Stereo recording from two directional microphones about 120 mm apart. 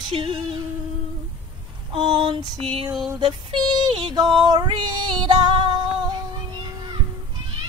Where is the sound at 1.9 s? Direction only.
45° right (ahead or behind).